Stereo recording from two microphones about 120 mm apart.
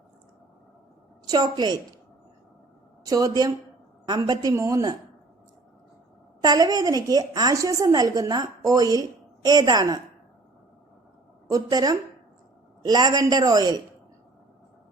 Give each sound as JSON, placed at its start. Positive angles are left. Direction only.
{"t": 1.3, "sound": "a woman's voice", "side_deg": -35}
{"t": 3.1, "sound": "a woman's voice", "side_deg": -30}
{"t": 6.4, "sound": "a woman's voice", "side_deg": -30}
{"t": 11.5, "sound": "a woman's voice", "side_deg": -30}